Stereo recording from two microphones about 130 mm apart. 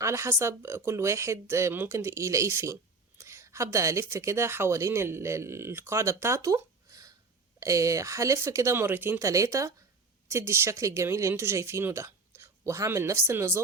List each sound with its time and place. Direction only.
0.0 s speech: 20° right (ahead or behind)